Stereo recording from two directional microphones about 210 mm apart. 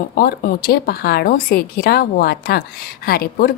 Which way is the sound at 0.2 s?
45° left (ahead or behind).